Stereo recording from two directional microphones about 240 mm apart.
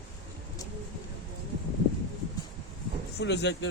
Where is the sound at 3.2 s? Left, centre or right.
Left.